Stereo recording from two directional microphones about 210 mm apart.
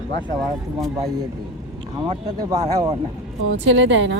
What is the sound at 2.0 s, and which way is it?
Speech, 20° right (ahead or behind).